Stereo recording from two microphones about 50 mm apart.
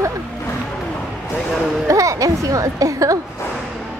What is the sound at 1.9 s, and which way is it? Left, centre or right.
Speech, right.